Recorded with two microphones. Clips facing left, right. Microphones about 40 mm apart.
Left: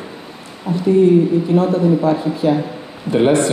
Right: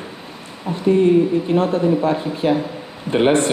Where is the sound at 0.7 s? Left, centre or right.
Right.